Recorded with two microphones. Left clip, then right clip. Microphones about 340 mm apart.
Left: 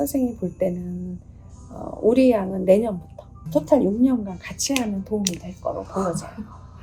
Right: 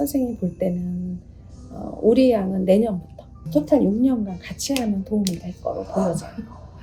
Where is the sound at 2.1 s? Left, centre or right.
Left.